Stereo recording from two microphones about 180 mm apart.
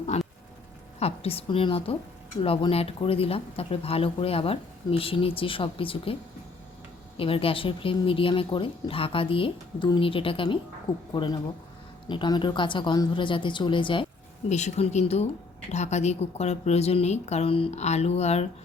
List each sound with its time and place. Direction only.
0.1 s a sound: 40° left (ahead or behind)
0.9 s speech: 35° left (ahead or behind)
7.2 s speech: 30° left (ahead or behind)
14.5 s speech: 40° left (ahead or behind)